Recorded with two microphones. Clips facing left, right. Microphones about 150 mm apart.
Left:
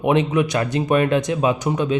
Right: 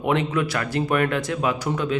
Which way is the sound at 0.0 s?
20° left (ahead or behind).